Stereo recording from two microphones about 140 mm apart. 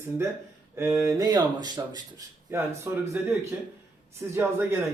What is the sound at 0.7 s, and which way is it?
A man's voice, 20° right (ahead or behind).